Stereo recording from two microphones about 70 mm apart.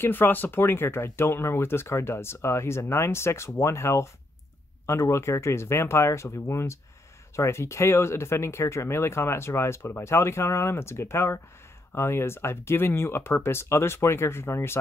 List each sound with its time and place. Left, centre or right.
0.0 s speech: left